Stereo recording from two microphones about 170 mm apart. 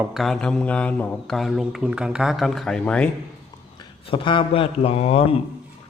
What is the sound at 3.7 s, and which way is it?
A man's voice, 30° left (ahead or behind).